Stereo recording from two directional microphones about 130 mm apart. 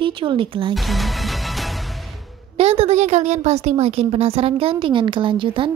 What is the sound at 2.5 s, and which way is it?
A woman's voice, 55° right (ahead or behind).